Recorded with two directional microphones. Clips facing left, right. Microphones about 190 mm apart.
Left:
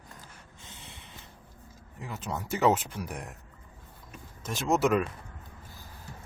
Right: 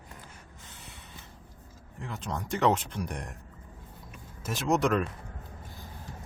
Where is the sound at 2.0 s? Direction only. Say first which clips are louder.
Even; 5° left (ahead or behind).